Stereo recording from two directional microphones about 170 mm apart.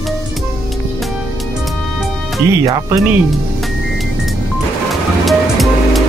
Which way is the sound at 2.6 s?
20° right (ahead or behind).